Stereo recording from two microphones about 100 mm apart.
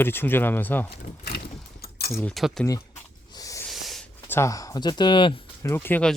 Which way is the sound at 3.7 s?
Centre (ahead or behind).